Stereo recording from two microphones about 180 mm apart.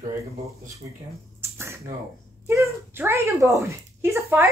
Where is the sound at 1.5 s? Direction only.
15° right (ahead or behind).